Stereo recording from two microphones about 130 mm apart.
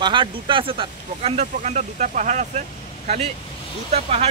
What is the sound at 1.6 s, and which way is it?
Speech, 70° right (ahead or behind).